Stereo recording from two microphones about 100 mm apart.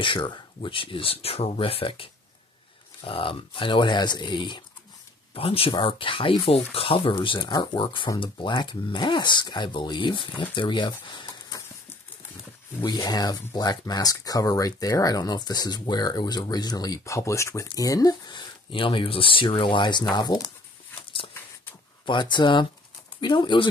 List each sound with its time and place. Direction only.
0.0 s speech: 55° left (ahead or behind)
5.3 s speech: 70° left (ahead or behind); by 11.5 s 50° left (ahead or behind)
12.8 s speech: 40° left (ahead or behind)
22.0 s speech: 50° left (ahead or behind)